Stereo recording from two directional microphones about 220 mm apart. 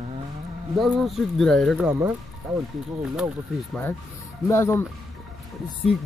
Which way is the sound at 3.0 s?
5° right (ahead or behind).